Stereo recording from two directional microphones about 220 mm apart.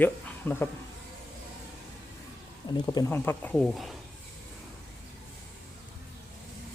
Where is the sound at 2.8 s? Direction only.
15° left (ahead or behind).